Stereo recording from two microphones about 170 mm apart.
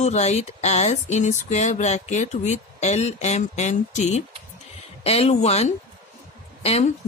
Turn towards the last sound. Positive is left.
turn(degrees=40)  # may be behind; listen again after turning